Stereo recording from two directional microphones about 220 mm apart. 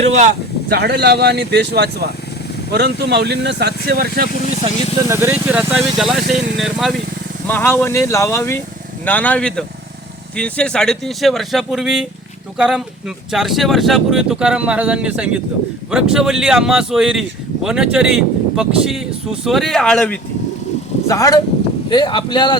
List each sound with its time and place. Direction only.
0.7 s speech: 45° right (ahead or behind)
4.6 s speech: 10° right (ahead or behind); by 20.1 s 5° left (ahead or behind)
21.1 s speech: 15° left (ahead or behind)